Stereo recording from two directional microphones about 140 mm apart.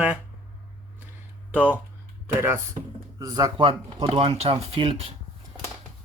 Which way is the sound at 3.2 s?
25° right (ahead or behind).